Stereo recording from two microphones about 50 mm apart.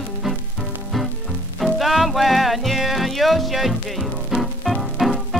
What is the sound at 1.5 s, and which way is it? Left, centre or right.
Music, centre.